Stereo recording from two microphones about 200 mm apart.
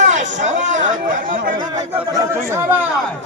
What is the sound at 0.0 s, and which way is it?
Chatter, 35° right (ahead or behind).